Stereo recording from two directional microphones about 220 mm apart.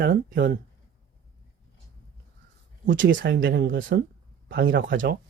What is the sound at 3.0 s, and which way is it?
Speech, 40° right (ahead or behind).